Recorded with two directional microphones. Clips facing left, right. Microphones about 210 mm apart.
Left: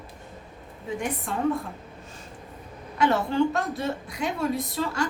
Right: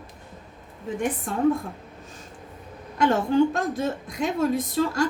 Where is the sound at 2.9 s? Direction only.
45° right (ahead or behind).